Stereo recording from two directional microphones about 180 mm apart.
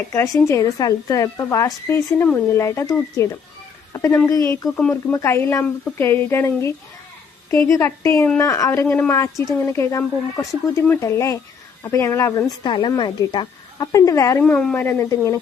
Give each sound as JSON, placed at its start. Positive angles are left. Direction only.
{"t": 0.1, "sound": "a woman's voice", "side_deg": 15}
{"t": 14.4, "sound": "a woman's voice", "side_deg": 5}